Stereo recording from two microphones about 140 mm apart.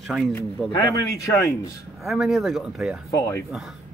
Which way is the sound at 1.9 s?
Centre (ahead or behind).